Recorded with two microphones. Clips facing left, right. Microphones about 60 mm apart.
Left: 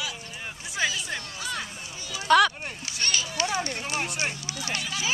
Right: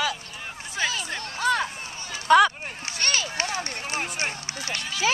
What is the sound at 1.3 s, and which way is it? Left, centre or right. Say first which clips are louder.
Run: right 10 dB; right.